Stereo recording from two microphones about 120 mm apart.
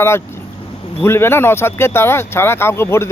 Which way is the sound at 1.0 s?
20° left (ahead or behind).